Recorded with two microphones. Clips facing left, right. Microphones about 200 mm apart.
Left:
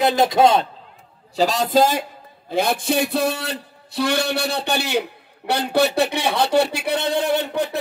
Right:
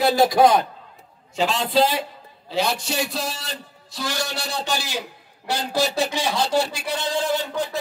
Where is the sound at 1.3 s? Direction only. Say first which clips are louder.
Left 3 dB; 40° left (ahead or behind).